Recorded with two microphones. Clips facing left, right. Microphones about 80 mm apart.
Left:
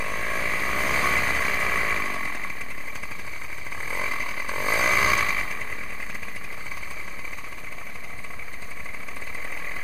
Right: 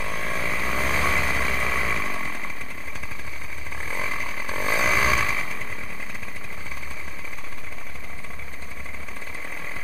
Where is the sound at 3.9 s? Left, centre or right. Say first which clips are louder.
Even; centre.